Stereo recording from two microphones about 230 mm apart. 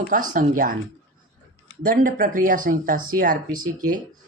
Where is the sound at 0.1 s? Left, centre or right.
Right.